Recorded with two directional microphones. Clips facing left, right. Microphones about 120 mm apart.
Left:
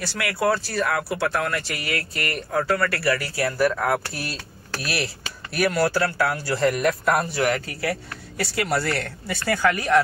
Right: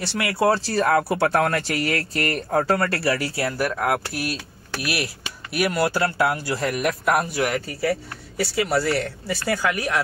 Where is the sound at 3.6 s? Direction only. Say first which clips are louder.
Left 2 dB; 10° right (ahead or behind).